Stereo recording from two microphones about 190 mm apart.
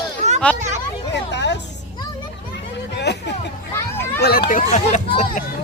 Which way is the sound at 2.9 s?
60° left (ahead or behind).